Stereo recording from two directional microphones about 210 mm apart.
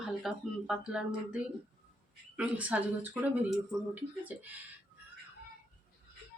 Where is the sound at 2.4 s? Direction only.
5° right (ahead or behind).